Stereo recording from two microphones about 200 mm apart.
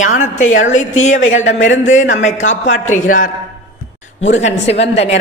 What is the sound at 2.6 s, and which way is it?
Speech, 40° left (ahead or behind).